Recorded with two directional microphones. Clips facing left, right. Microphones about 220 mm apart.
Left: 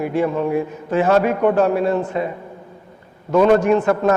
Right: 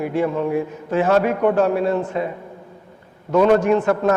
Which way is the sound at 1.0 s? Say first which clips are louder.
Left 1 dB; 20° left (ahead or behind).